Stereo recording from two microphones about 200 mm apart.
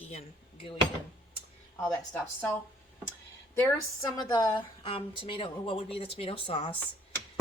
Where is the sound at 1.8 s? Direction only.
10° left (ahead or behind).